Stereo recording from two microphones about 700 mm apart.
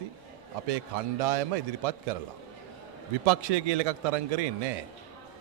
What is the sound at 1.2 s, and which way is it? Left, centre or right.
Speech, right.